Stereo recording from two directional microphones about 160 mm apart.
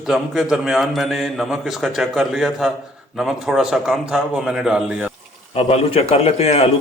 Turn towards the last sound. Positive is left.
turn(degrees=40)  # may be behind; listen again after turning